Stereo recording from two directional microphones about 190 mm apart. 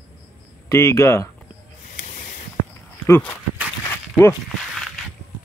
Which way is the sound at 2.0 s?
40° left (ahead or behind).